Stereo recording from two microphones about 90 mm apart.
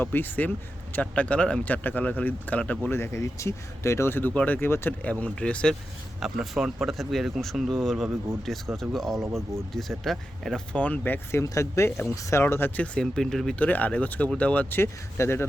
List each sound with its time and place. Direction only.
0.0 s speech: 20° left (ahead or behind)
2.9 s speech: 30° left (ahead or behind)
5.2 s speech: 10° left (ahead or behind)
6.1 s speech: 5° right (ahead or behind); by 12.8 s 25° left (ahead or behind)
12.8 s speech: 10° left (ahead or behind)
13.6 s speech: 15° left (ahead or behind)